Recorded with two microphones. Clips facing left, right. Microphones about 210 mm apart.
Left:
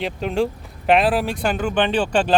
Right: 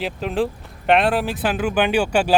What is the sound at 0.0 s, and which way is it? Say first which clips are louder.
Speech: left 1 dB; centre (ahead or behind).